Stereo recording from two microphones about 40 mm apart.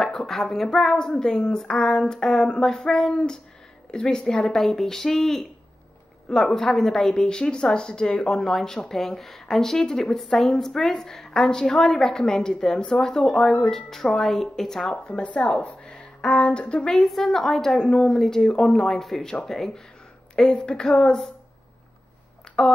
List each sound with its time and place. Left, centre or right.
0.0 s a woman's voice: centre
4.6 s a woman's voice: centre
15.0 s a woman's voice: left
16.9 s a woman's voice: centre
20.6 s a woman's voice: left
22.6 s speech: centre